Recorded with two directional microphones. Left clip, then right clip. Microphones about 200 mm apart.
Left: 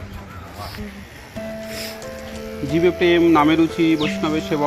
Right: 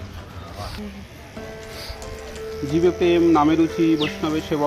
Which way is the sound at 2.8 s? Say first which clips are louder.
Left 2 dB; 25° left (ahead or behind).